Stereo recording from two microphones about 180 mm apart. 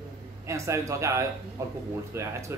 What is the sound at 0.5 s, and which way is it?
Speech, 15° right (ahead or behind).